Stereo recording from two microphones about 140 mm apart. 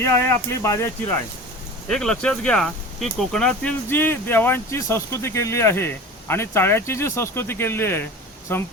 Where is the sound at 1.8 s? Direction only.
5° left (ahead or behind).